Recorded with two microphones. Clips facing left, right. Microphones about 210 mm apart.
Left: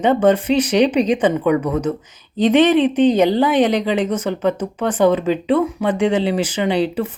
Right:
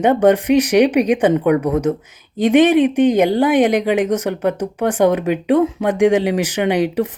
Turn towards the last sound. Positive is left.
turn(degrees=-15)  # may be behind; listen again after turning